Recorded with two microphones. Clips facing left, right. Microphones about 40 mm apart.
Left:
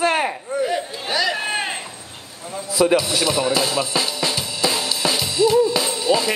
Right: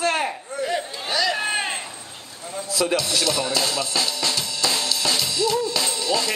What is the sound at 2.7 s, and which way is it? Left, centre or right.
Speech, centre.